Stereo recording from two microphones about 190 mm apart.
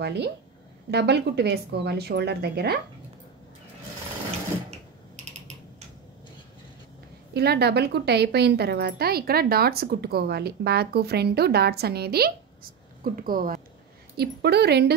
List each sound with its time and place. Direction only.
0.0 s a woman's voice: 60° right (ahead or behind)
4.6 s typing: 40° right (ahead or behind)
7.3 s a woman's voice: 60° right (ahead or behind)